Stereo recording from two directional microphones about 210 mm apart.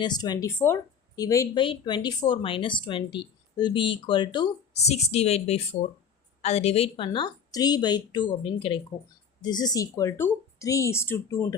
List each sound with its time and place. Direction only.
0.0 s a woman's voice: 20° left (ahead or behind)